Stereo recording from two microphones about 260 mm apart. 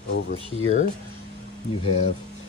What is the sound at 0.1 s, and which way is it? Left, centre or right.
Speech, left.